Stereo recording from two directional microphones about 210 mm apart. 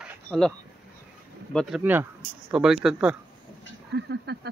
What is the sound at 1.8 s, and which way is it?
Speech, 10° right (ahead or behind).